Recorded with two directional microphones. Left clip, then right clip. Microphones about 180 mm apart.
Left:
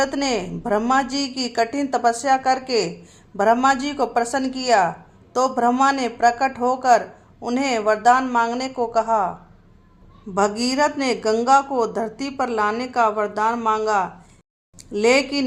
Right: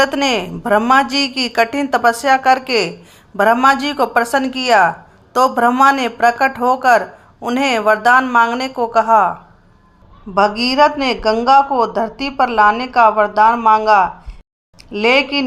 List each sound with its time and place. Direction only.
0.0 s a woman's voice: 15° right (ahead or behind)
10.3 s a woman's voice: 15° right (ahead or behind)